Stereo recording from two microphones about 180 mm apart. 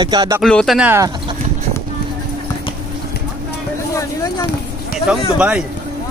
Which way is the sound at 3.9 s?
20° left (ahead or behind).